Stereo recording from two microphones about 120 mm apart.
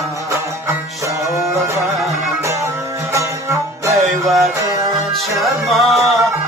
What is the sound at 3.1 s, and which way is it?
Music, 25° right (ahead or behind).